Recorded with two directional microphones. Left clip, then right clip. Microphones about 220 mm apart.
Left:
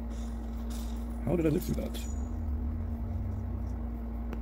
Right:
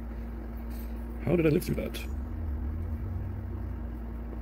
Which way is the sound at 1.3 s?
Centre (ahead or behind).